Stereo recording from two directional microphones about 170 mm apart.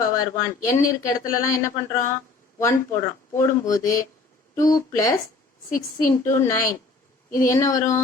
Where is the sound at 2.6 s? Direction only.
15° left (ahead or behind).